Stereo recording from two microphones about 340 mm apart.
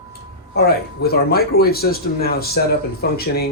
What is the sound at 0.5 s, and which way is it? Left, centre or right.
Speech, left.